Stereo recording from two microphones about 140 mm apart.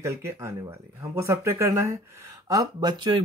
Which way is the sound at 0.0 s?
20° right (ahead or behind).